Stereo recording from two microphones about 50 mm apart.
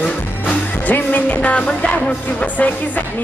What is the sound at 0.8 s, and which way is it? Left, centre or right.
Music, left.